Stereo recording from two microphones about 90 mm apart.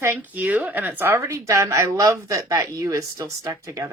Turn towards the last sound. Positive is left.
turn(degrees=-35)  # may be behind; listen again after turning